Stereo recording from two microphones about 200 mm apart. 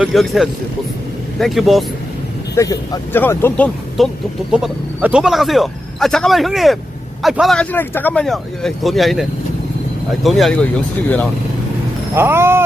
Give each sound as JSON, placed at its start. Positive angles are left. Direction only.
{"t": 0.0, "sound": "speech", "side_deg": 0}
{"t": 2.6, "sound": "speech", "side_deg": 15}
{"t": 4.0, "sound": "speech", "side_deg": 0}
{"t": 10.2, "sound": "speech", "side_deg": 0}
{"t": 12.1, "sound": "speech", "side_deg": -10}